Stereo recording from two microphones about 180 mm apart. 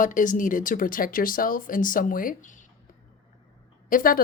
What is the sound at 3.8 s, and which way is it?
Speech, 50° left (ahead or behind).